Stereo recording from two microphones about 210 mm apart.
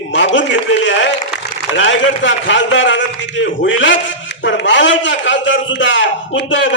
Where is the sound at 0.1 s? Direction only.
60° left (ahead or behind).